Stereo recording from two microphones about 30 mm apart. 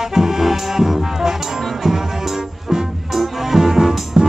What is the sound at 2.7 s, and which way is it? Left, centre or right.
Music, centre.